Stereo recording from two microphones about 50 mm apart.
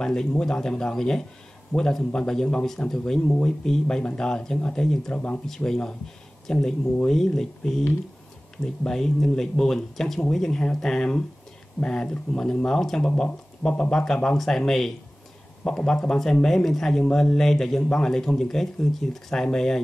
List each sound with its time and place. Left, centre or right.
0.0 s speech: centre
3.3 s speech: left
5.1 s speech: left